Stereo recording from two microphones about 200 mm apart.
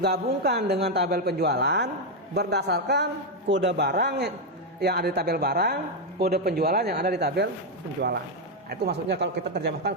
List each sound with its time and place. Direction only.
0.0 s speech: 55° right (ahead or behind)